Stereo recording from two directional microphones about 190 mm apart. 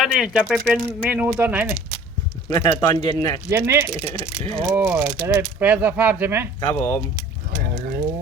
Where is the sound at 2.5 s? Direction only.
20° left (ahead or behind).